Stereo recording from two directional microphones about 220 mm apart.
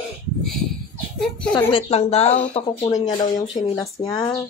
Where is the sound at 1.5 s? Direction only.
25° left (ahead or behind).